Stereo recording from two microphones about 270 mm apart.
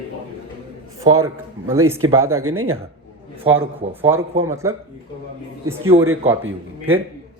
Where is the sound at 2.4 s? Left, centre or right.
Right.